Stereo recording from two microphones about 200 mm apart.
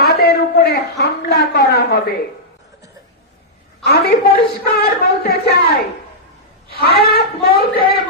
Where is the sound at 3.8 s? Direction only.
50° left (ahead or behind).